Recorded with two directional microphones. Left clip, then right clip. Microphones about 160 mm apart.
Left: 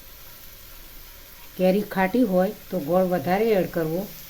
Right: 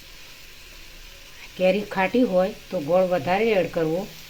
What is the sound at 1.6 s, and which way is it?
Speech, 30° left (ahead or behind).